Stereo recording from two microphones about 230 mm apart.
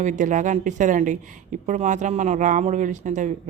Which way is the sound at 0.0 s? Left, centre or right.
Right.